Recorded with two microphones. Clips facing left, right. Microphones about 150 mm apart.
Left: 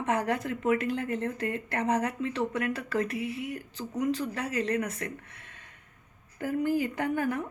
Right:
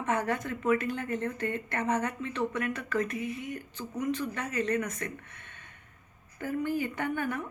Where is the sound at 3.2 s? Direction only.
90° left.